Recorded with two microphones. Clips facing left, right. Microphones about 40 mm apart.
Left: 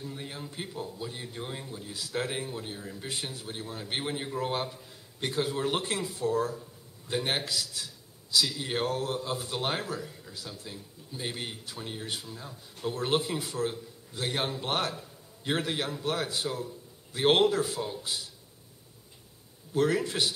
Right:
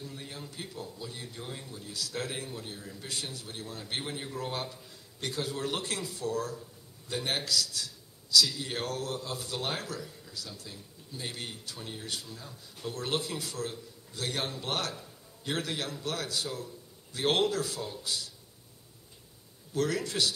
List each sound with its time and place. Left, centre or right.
0.0 s a man's voice: centre
19.7 s a man's voice: left